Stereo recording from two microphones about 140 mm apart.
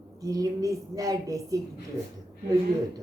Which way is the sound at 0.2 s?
25° right (ahead or behind).